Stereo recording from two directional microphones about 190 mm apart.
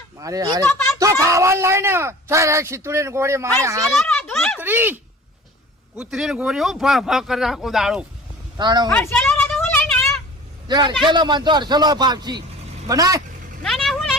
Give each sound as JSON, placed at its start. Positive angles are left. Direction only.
{"t": 0.2, "sound": "a man's voice", "side_deg": -20}
{"t": 0.6, "sound": "speech", "side_deg": 15}
{"t": 0.9, "sound": "speech", "side_deg": -15}
{"t": 3.9, "sound": "speech", "side_deg": 5}
{"t": 4.6, "sound": "speech", "side_deg": -10}
{"t": 6.0, "sound": "speech", "side_deg": -5}
{"t": 8.5, "sound": "a man's voice", "side_deg": -20}
{"t": 8.9, "sound": "a sound", "side_deg": 5}
{"t": 10.7, "sound": "a man's voice", "side_deg": -25}
{"t": 13.6, "sound": "vehicle", "side_deg": 0}